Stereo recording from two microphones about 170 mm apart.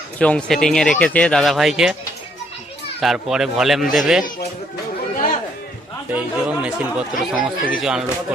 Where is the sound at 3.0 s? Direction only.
Centre (ahead or behind).